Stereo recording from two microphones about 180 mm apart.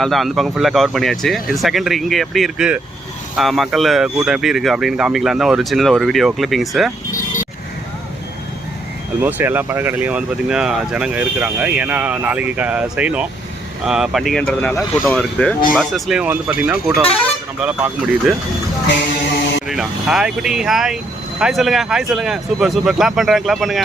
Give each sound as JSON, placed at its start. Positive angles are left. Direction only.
{"t": 0.0, "sound": "speech", "side_deg": 0}
{"t": 9.2, "sound": "speech", "side_deg": -10}
{"t": 19.6, "sound": "speech", "side_deg": -5}